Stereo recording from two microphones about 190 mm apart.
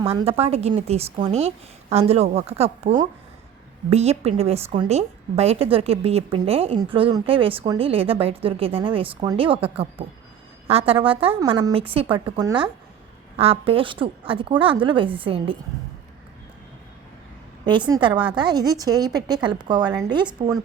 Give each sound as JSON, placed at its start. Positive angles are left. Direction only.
{"t": 0.0, "sound": "a woman's voice", "side_deg": -30}
{"t": 17.7, "sound": "a woman's voice", "side_deg": -25}
{"t": 18.1, "sound": "a woman's voice", "side_deg": -5}
{"t": 18.3, "sound": "a woman's voice", "side_deg": -20}